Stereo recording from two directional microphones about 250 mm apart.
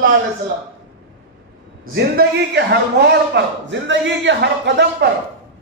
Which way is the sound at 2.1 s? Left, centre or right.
Right.